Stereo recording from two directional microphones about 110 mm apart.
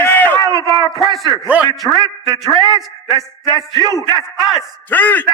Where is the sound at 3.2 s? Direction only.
30° left (ahead or behind).